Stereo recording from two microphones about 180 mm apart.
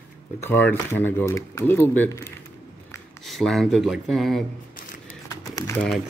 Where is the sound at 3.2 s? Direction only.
Centre (ahead or behind).